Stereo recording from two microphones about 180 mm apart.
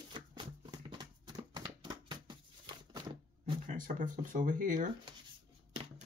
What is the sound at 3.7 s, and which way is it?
Speech, 45° right (ahead or behind).